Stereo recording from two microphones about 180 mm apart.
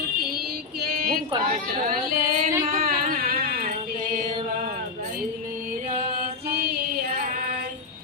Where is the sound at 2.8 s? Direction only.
55° right (ahead or behind).